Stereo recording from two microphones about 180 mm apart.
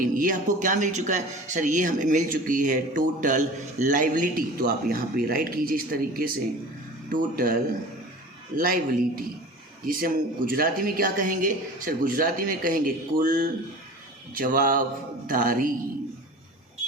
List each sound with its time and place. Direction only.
0.0 s a man's voice: 50° right (ahead or behind)
8.5 s a man's voice: 55° right (ahead or behind)